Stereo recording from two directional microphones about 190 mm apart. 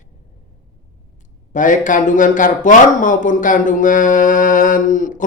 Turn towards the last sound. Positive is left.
turn(degrees=45)  # may be behind; listen again after turning